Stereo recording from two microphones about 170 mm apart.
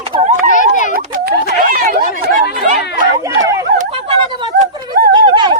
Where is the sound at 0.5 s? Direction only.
50° left (ahead or behind).